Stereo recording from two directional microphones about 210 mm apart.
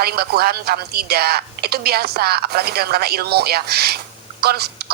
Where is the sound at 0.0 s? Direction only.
50° right (ahead or behind).